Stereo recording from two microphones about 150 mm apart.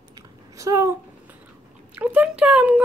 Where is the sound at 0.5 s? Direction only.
20° right (ahead or behind).